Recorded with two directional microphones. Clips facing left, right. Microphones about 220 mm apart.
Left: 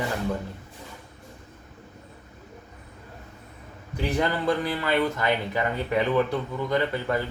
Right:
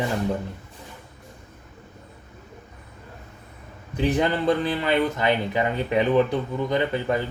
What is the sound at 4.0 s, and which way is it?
Speech, 20° right (ahead or behind).